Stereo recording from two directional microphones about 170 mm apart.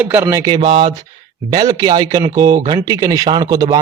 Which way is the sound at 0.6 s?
30° right (ahead or behind).